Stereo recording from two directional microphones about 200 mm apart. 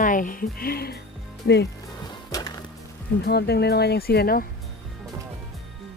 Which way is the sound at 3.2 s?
55° left (ahead or behind).